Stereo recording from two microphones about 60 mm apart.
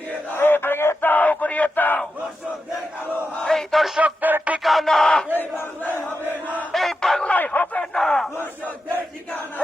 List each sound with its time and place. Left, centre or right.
0.3 s a sound: left
1.1 s battle cry: left
3.4 s battle cry: centre
4.0 s radio: right
4.6 s a sound: centre
5.4 s battle cry: left
6.7 s chant: centre
7.3 s a sound: left
7.9 s battle cry: centre